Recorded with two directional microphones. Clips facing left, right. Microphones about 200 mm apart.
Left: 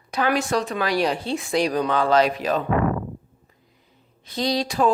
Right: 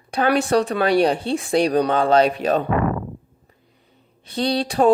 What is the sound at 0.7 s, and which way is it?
Speech, 30° right (ahead or behind).